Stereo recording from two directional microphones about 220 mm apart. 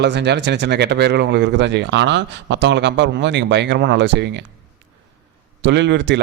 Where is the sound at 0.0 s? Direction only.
50° right (ahead or behind).